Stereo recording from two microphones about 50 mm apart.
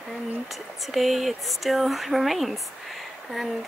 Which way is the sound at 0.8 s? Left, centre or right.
Centre.